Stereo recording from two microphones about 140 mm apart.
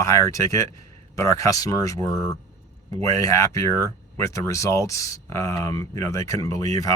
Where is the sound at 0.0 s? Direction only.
20° left (ahead or behind).